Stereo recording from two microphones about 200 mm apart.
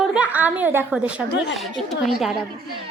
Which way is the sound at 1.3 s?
60° left (ahead or behind).